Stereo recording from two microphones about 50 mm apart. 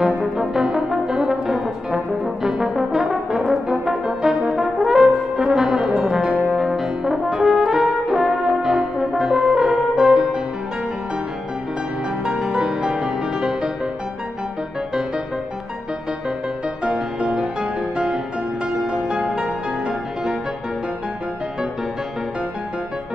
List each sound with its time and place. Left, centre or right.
0.0 s brass instrument: right
0.4 s brass instrument: centre
6.5 s french horn: centre
7.3 s brass instrument: centre
9.9 s music: centre
12.3 s music: centre
16.8 s music: centre